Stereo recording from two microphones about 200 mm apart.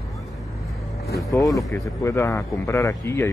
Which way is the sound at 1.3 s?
15° left (ahead or behind).